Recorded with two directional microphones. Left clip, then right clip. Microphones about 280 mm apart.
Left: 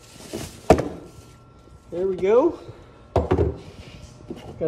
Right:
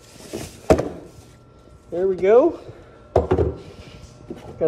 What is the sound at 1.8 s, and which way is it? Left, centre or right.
Door, centre.